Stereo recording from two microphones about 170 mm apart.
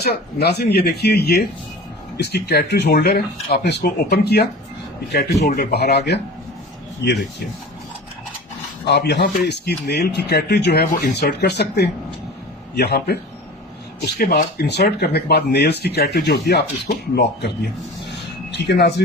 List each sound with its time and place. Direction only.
0.0 s speech: 70° left (ahead or behind)
8.9 s speech: 80° left
18.1 s a sound: 90° left